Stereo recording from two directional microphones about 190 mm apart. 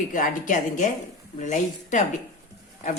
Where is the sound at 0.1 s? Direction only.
45° left (ahead or behind).